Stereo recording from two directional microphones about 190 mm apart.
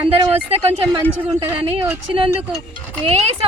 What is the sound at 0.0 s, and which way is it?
Speech, 30° right (ahead or behind).